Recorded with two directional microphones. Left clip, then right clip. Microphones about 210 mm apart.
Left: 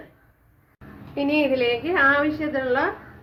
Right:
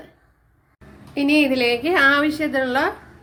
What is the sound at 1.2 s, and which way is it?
Speech, 45° right (ahead or behind).